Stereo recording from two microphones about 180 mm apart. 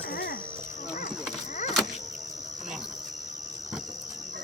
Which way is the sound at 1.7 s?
Centre (ahead or behind).